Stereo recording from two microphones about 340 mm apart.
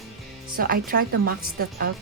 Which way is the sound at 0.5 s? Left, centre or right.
Right.